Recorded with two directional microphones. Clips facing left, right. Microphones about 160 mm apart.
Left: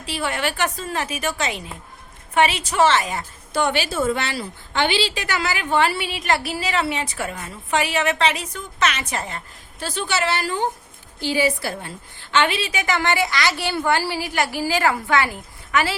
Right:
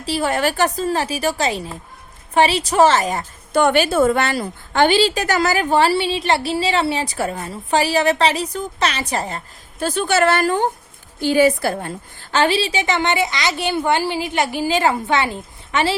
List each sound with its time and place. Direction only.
0.0 s a woman's voice: 40° right (ahead or behind)
9.8 s a woman's voice: 50° right (ahead or behind); by 16.0 s 25° right (ahead or behind)